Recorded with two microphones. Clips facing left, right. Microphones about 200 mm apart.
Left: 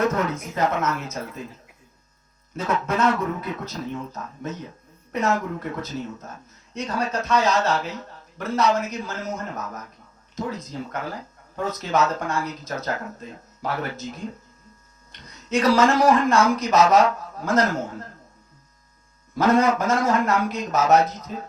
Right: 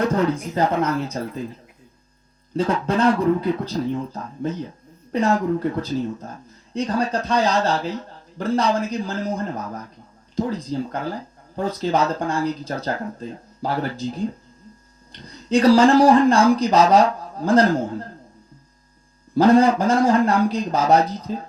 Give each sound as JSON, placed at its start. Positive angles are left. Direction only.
{"t": 0.0, "sound": "speech", "side_deg": -35}
{"t": 2.5, "sound": "speech", "side_deg": -30}
{"t": 19.3, "sound": "speech", "side_deg": -30}